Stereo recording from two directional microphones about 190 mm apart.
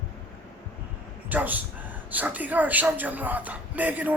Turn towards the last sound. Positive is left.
turn(degrees=-10)  # may be behind; listen again after turning